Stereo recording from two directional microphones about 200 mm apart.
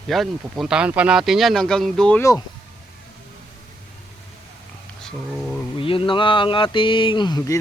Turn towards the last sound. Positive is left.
turn(degrees=20)  # may be behind; listen again after turning